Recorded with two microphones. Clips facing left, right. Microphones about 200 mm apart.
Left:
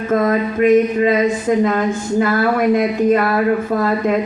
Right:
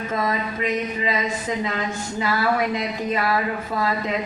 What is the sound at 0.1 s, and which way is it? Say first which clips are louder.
A man's voice: left 10 dB; 55° left (ahead or behind).